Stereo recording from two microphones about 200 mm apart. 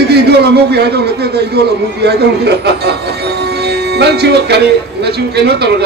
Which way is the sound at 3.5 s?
55° right (ahead or behind).